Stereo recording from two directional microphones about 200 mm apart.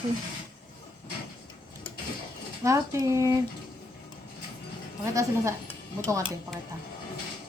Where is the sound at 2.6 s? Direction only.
15° right (ahead or behind).